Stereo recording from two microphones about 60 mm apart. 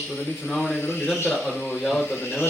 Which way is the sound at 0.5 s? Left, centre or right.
Centre.